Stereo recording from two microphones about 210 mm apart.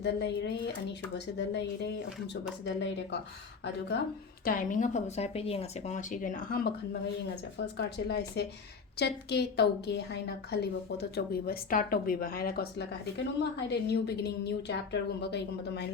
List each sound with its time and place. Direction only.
0.0 s a woman's voice: 55° left (ahead or behind)
4.4 s a woman's voice: 40° left (ahead or behind)
7.6 s a woman's voice: 55° left (ahead or behind)